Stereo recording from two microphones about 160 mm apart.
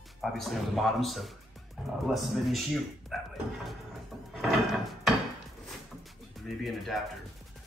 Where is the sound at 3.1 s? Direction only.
Centre (ahead or behind).